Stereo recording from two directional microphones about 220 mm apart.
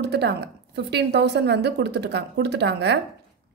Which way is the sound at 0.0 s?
50° right (ahead or behind).